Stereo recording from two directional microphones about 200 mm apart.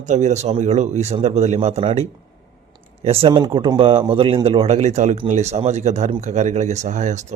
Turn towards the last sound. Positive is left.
turn(degrees=-35)  # may be behind; listen again after turning